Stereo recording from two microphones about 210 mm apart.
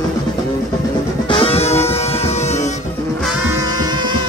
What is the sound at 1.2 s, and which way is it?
Music, 25° left (ahead or behind).